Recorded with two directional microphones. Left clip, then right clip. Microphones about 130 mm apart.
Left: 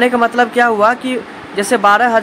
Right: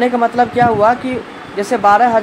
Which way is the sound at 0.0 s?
20° left (ahead or behind).